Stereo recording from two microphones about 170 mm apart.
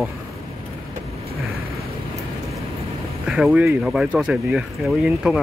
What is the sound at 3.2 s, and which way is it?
Speech, 5° right (ahead or behind).